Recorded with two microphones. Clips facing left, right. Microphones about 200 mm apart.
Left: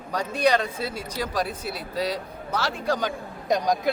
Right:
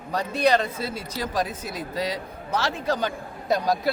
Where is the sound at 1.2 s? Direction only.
10° right (ahead or behind).